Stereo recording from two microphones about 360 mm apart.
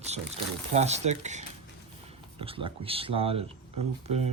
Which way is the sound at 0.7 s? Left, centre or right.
Centre.